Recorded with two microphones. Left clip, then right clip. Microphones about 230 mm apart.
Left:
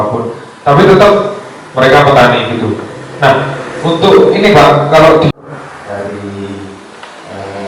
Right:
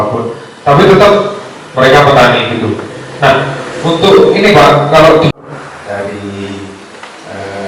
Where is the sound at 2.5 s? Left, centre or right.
Centre.